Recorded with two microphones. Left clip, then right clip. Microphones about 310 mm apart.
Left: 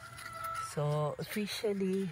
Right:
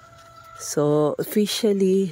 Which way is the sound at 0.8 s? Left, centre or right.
Right.